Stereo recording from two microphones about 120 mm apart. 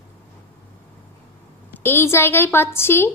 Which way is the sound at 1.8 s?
20° left (ahead or behind).